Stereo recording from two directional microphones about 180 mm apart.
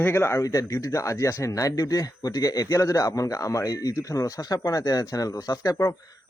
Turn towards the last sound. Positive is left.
turn(degrees=20)  # may be behind; listen again after turning